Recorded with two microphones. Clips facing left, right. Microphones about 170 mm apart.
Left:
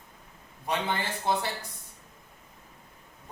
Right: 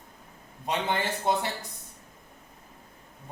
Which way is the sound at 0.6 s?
20° right (ahead or behind).